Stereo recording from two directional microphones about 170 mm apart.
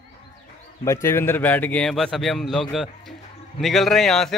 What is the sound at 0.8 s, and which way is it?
A man's voice, 15° left (ahead or behind).